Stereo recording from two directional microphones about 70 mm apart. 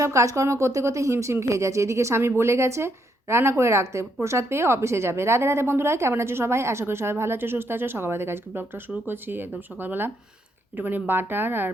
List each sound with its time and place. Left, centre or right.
0.0 s speech: right